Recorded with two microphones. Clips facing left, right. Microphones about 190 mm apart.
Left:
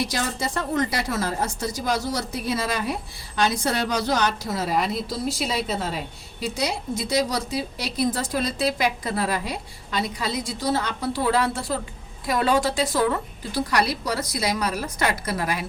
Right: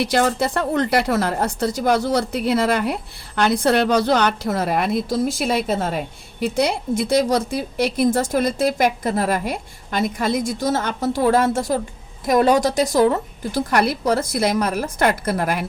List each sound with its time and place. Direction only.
0.0 s a woman's voice: 65° right (ahead or behind)